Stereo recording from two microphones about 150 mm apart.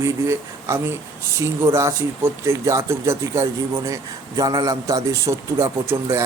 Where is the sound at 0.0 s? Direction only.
20° right (ahead or behind).